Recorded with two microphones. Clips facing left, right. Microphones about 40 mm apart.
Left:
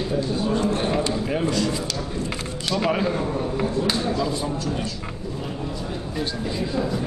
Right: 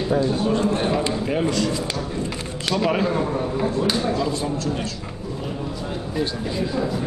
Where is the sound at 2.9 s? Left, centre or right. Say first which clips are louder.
Right 1 dB; centre.